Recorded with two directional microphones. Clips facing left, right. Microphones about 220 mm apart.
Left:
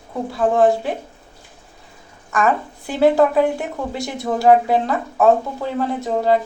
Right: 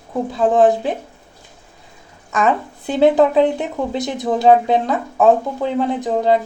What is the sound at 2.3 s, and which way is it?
Speech, 20° right (ahead or behind).